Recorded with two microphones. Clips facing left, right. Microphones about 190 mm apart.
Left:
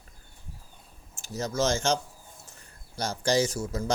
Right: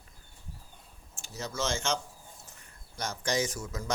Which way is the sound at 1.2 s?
40° left (ahead or behind).